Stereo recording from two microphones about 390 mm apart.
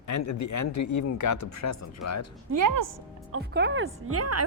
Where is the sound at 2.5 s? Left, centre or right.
Right.